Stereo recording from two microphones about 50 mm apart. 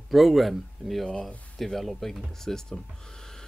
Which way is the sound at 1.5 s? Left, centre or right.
Centre.